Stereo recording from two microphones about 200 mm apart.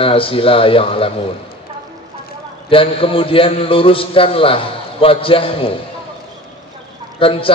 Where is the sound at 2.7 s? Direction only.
25° left (ahead or behind).